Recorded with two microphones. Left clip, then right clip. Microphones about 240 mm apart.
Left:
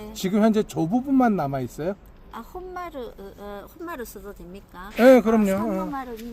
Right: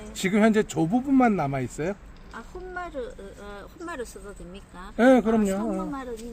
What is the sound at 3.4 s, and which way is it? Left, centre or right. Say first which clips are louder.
Speech: left 3 dB; left.